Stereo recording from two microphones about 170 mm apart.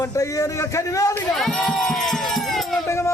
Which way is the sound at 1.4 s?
5° left (ahead or behind).